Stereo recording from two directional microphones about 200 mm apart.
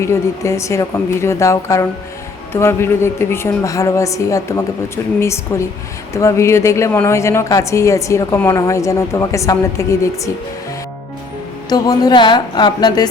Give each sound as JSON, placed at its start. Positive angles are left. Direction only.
{"t": 0.0, "sound": "speech", "side_deg": 15}
{"t": 11.7, "sound": "a woman's voice", "side_deg": 20}